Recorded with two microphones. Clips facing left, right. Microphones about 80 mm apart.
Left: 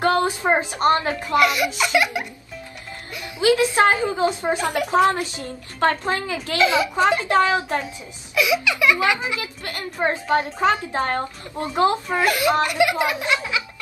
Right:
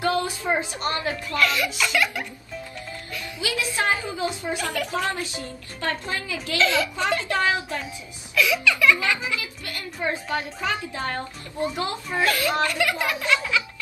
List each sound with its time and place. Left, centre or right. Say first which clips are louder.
0.0 s a woman's voice: left 5 dB; left
1.3 s speech: left 6 dB; centre
3.3 s a woman's voice: left 11 dB; left
4.6 s speech: left 8 dB; left
5.2 s speech: left 3 dB; right
5.9 s a woman's voice: left 6 dB; left
6.6 s speech: left 5 dB; centre
7.3 s a child's voice: left 6 dB; left
8.4 s speech: left 1 dB; centre
9.4 s a woman's voice: left 4 dB; left
9.9 s a woman's voice: left 7 dB; left
10.9 s a woman's voice: left 6 dB; left
12.3 s speech: left 4 dB; centre